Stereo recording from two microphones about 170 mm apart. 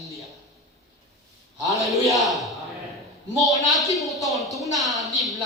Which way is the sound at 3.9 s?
Centre (ahead or behind).